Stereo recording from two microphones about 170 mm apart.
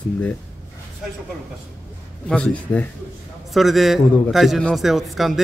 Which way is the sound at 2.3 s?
5° left (ahead or behind).